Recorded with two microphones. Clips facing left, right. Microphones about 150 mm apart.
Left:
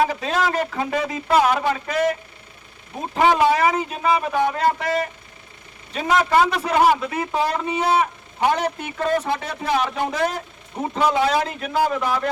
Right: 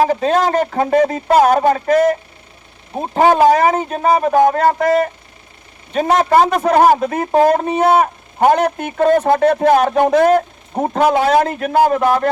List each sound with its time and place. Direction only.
0.0 s a man's voice: 40° right (ahead or behind)